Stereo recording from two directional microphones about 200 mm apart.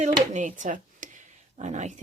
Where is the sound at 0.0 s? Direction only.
40° right (ahead or behind).